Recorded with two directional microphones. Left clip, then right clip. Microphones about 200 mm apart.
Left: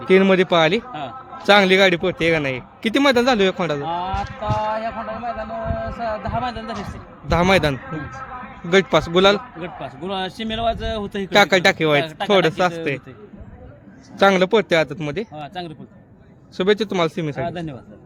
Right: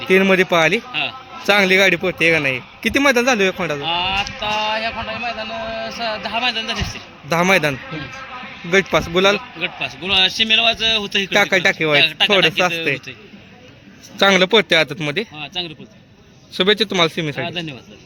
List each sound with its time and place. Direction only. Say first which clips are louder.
0.1 s a man's voice: right 1 dB; 10° left (ahead or behind)
4.7 s a man's voice: right 3 dB; 5° right (ahead or behind)
6.0 s speech: right 3 dB; 10° right (ahead or behind)
6.5 s a man's voice: right 7 dB; 20° left (ahead or behind)
7.3 s a man's voice: right 1 dB; 5° left (ahead or behind)
7.9 s speech: right 1 dB; 30° left (ahead or behind)
8.7 s a man's voice: even; 15° left (ahead or behind)
14.2 s a man's voice: right 2 dB; centre (ahead or behind)
15.4 s a man's voice: right 5 dB; 25° left (ahead or behind)
16.6 s a man's voice: right 3 dB; centre (ahead or behind)
17.4 s a man's voice: right 1 dB; 15° left (ahead or behind)